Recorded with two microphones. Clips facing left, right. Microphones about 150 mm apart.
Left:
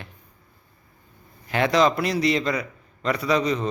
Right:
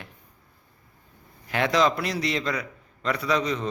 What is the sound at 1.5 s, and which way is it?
A man's voice, centre (ahead or behind).